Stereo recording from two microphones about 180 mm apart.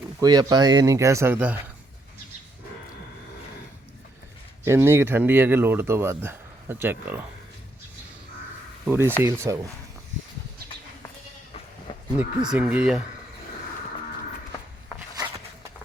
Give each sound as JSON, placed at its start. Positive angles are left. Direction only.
{"t": 0.2, "sound": "speech", "side_deg": -20}
{"t": 4.6, "sound": "speech", "side_deg": -15}
{"t": 8.8, "sound": "speech", "side_deg": -10}
{"t": 12.1, "sound": "speech", "side_deg": -5}